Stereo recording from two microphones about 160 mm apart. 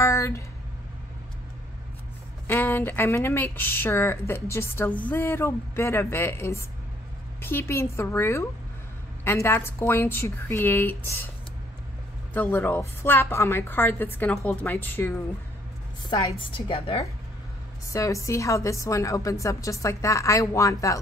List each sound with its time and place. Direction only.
0.0 s a sound: 20° left (ahead or behind)
2.4 s speech: 10° left (ahead or behind)
12.4 s speech: 15° left (ahead or behind)
16.3 s a woman's voice: 30° left (ahead or behind)
17.8 s a woman's voice: 20° left (ahead or behind)